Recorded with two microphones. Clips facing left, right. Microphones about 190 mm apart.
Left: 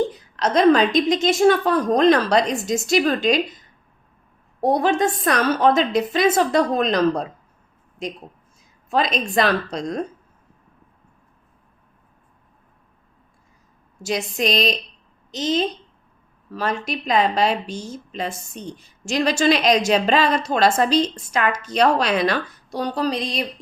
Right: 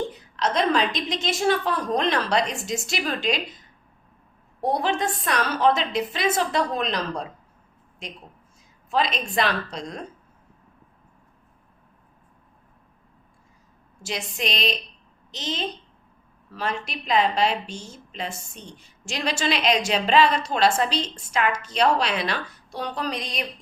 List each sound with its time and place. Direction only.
0.3 s a woman's voice: 45° left (ahead or behind)
4.6 s a woman's voice: 45° left (ahead or behind)
8.9 s a woman's voice: 45° left (ahead or behind)
14.0 s a woman's voice: 40° left (ahead or behind)